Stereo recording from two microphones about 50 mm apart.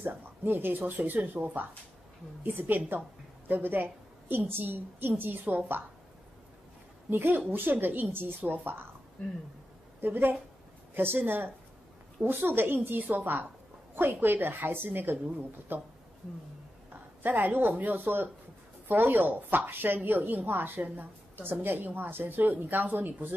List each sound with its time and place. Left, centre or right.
0.0 s a woman's voice: right
7.1 s a woman's voice: right
10.0 s a woman's voice: right
17.2 s speech: right